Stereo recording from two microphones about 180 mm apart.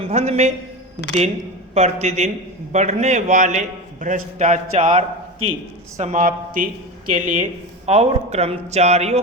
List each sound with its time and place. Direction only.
0.0 s a man's voice: 35° right (ahead or behind)
1.7 s a man's voice: 40° right (ahead or behind)